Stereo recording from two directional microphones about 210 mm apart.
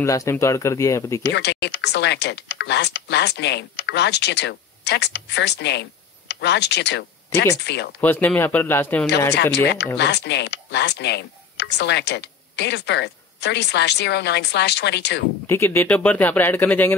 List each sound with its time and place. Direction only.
0.0 s speech: 15° left (ahead or behind)
1.2 s speech: 55° left (ahead or behind)
8.0 s speech: 10° left (ahead or behind)
9.3 s speech: 55° left (ahead or behind)
15.4 s speech: 10° left (ahead or behind)